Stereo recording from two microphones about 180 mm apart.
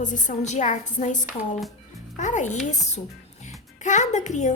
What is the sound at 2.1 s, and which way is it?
Speech, 45° left (ahead or behind).